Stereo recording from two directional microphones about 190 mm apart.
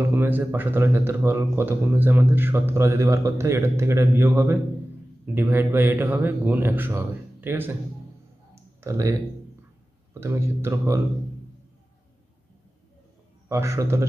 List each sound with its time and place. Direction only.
0.1 s speech: 10° right (ahead or behind)
8.5 s clicking: 15° right (ahead or behind)
10.2 s speech: 15° right (ahead or behind)
13.5 s speech: 15° right (ahead or behind)